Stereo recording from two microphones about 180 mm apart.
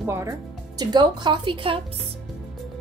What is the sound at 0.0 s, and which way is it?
Speech, 15° right (ahead or behind).